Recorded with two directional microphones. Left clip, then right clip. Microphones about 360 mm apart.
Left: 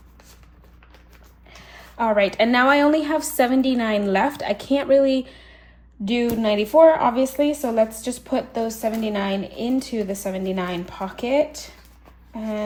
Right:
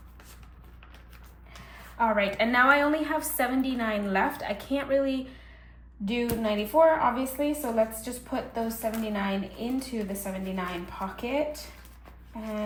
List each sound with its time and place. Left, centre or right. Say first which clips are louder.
2.0 s a woman's voice: left 6 dB; centre